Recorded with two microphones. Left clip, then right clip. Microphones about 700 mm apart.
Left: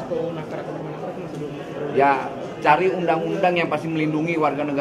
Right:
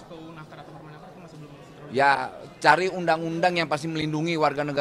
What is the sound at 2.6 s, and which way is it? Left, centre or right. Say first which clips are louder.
A man's voice: left 2 dB; right.